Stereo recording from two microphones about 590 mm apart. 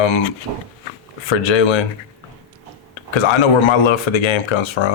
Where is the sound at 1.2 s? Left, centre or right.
Left.